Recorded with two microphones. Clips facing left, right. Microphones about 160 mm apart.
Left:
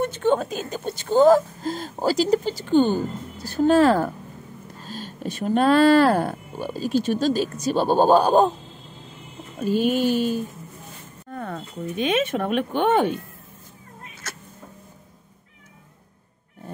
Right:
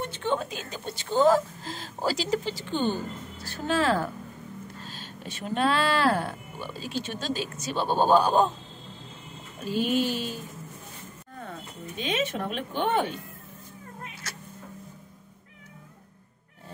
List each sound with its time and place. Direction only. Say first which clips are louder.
0.0 s speech: left 8 dB; 45° left (ahead or behind)
9.7 s speech: left 5 dB; 45° left (ahead or behind)
12.0 s speech: left 6 dB; 60° left (ahead or behind)